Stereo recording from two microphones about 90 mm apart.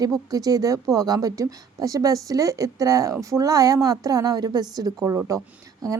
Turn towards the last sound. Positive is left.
turn(degrees=-40)  # may be behind; listen again after turning